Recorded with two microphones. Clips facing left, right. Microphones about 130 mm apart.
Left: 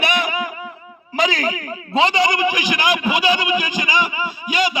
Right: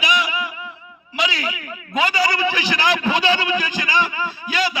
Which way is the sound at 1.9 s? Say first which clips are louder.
Left 3 dB; 25° left (ahead or behind).